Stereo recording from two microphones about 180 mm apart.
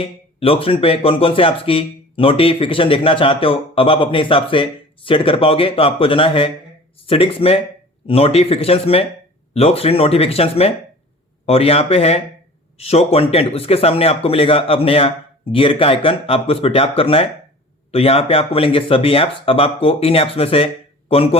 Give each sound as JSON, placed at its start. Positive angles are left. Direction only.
{"t": 0.0, "sound": "speech", "side_deg": 30}